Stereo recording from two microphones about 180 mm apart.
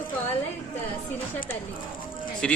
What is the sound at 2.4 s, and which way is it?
Speech, 5° left (ahead or behind).